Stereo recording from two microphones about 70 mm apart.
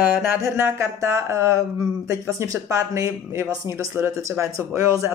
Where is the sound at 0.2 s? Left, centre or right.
Right.